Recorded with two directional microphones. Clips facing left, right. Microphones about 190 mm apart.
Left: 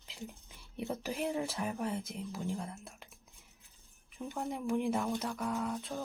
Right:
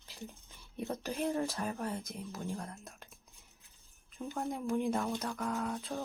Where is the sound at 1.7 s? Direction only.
15° left (ahead or behind).